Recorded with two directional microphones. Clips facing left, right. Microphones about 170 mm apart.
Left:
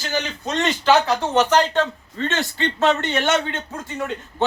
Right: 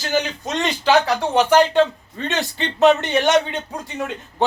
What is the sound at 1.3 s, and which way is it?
Speech, 10° right (ahead or behind).